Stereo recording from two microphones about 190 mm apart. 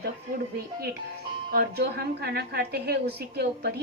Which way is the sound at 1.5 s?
55° right (ahead or behind).